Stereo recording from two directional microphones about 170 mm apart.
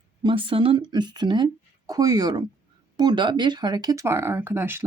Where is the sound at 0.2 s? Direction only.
30° right (ahead or behind).